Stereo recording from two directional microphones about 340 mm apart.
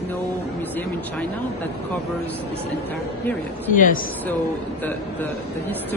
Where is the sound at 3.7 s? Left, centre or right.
Left.